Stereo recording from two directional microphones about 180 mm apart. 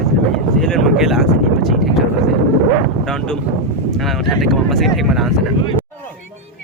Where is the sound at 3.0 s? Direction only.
5° left (ahead or behind).